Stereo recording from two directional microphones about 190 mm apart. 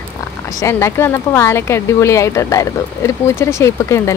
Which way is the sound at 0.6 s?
15° left (ahead or behind).